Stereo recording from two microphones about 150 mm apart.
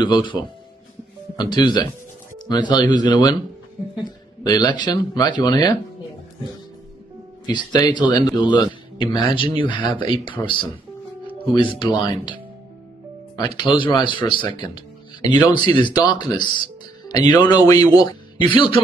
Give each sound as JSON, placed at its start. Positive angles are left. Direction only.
{"t": 0.0, "sound": "speech", "side_deg": 30}
{"t": 7.4, "sound": "speech", "side_deg": 25}
{"t": 11.5, "sound": "speech", "side_deg": 30}
{"t": 13.4, "sound": "speech", "side_deg": 30}